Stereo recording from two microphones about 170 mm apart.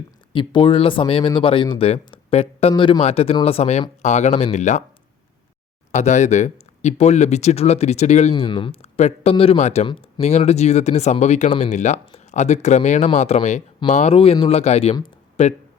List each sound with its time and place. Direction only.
0.3 s speech: 30° left (ahead or behind); by 4.8 s 45° left (ahead or behind)
5.9 s speech: 45° left (ahead or behind)
8.4 s speech: 30° left (ahead or behind)